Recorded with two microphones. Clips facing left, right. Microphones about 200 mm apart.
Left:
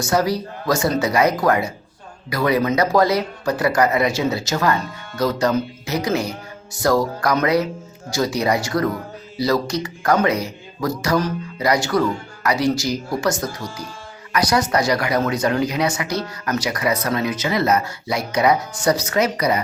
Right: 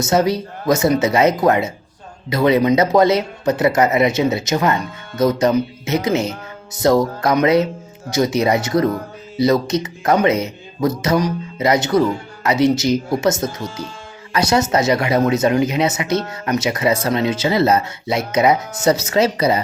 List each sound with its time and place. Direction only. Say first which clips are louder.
0.0 s speech: right 3 dB; 25° right (ahead or behind)